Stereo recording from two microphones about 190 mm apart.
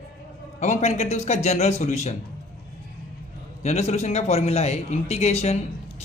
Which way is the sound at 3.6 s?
35° left (ahead or behind).